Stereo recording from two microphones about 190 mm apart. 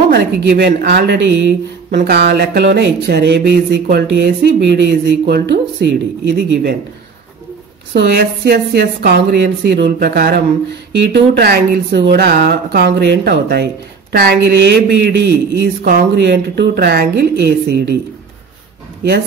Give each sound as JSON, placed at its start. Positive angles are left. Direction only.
{"t": 0.1, "sound": "speech", "side_deg": -60}
{"t": 7.9, "sound": "speech", "side_deg": -55}